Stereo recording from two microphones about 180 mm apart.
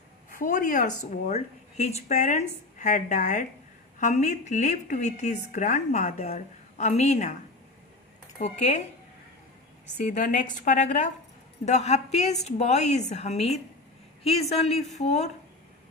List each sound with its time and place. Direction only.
0.3 s a woman's voice: 45° left (ahead or behind)
8.4 s a woman's voice: 40° left (ahead or behind)
10.0 s a woman's voice: 45° left (ahead or behind)